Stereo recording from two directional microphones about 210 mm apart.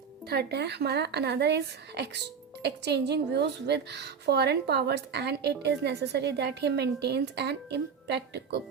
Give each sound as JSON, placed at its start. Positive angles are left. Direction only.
{"t": 0.3, "sound": "a woman's voice", "side_deg": -50}